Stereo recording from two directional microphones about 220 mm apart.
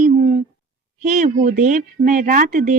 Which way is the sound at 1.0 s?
35° right (ahead or behind).